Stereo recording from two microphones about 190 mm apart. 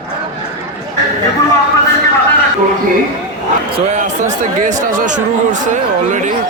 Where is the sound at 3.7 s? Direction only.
40° right (ahead or behind).